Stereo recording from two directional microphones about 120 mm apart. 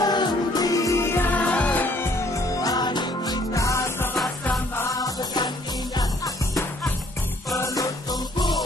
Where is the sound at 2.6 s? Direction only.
35° left (ahead or behind).